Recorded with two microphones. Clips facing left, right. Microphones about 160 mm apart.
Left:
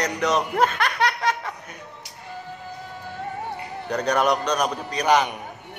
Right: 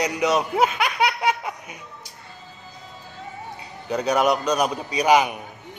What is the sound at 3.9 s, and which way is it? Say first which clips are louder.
A man's voice: right 1 dB; 5° right (ahead or behind).